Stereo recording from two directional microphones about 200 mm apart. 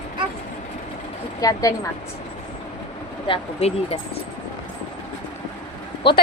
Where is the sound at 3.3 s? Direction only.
30° left (ahead or behind).